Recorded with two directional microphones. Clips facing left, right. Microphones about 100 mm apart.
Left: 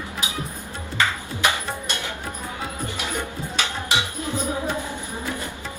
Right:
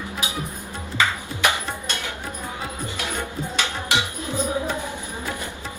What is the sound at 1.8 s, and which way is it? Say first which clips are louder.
Music: even; 20° left (ahead or behind).